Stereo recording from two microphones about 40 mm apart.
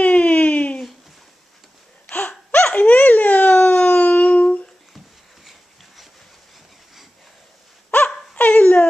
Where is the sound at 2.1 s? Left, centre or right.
Left.